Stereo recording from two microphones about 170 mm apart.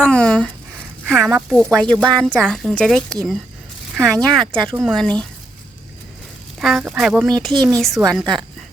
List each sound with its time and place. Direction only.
0.0 s a sound: 5° left (ahead or behind)
1.0 s a woman's voice: centre (ahead or behind)
6.6 s a woman's voice: centre (ahead or behind)
7.5 s speech: 25° right (ahead or behind)
7.8 s a woman's voice: centre (ahead or behind)
8.2 s speech: 25° right (ahead or behind)